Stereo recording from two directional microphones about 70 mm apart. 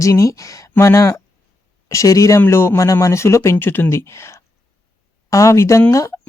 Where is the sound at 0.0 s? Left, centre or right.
Left.